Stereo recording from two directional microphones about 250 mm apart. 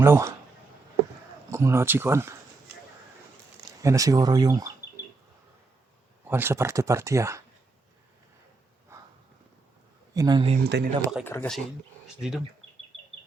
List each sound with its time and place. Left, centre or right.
0.0 s speech: centre
1.5 s speech: centre
3.8 s speech: centre
6.2 s speech: centre
10.2 s speech: centre
10.6 s speech: right
11.2 s speech: centre